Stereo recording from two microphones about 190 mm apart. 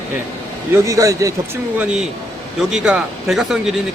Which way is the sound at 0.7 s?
15° right (ahead or behind).